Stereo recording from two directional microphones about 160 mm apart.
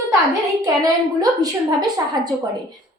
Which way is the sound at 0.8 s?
25° right (ahead or behind).